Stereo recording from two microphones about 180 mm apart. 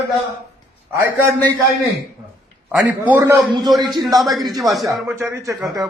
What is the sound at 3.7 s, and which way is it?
A man's voice, centre (ahead or behind).